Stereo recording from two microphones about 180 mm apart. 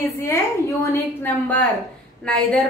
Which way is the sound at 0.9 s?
10° left (ahead or behind).